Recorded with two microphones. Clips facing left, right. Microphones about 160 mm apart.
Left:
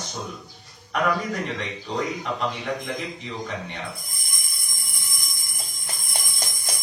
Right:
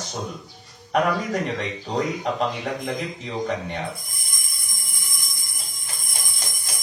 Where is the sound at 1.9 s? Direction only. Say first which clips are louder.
Right 3 dB; 40° right (ahead or behind).